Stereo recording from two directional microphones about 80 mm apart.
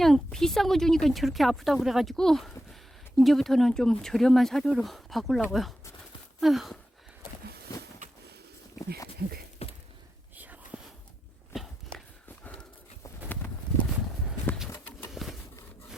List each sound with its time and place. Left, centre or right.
0.0 s speech: centre
10.3 s whispering: right
12.4 s clip-clop: centre
15.1 s a sound: centre